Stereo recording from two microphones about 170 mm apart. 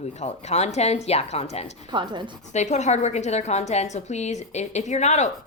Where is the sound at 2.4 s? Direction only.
45° left (ahead or behind).